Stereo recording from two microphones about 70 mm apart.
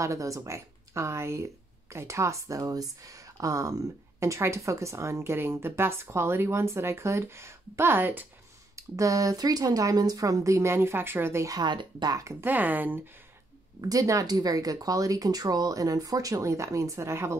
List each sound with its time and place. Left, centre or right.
0.0 s speech: right
8.7 s speech: right
11.4 s speech: right
12.2 s speech: right
12.4 s speech: right
13.7 s speech: right